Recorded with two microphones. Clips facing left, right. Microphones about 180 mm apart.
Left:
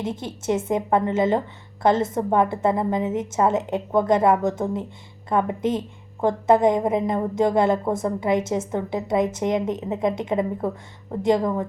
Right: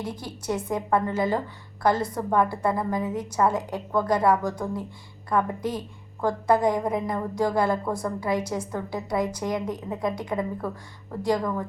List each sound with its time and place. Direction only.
0.0 s a woman's voice: 25° left (ahead or behind)